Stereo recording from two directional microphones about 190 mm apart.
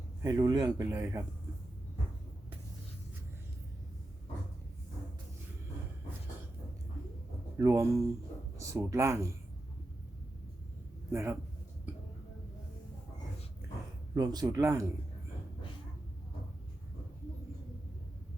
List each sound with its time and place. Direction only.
0.2 s speech: 20° right (ahead or behind)
7.6 s speech: 15° right (ahead or behind)
11.1 s speech: 15° right (ahead or behind)
14.2 s speech: 20° right (ahead or behind)